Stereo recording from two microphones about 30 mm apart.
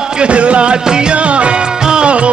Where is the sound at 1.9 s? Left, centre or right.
Right.